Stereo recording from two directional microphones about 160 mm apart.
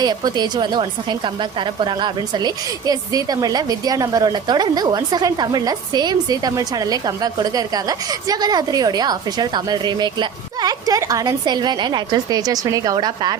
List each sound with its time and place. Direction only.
0.0 s a woman's voice: 25° right (ahead or behind)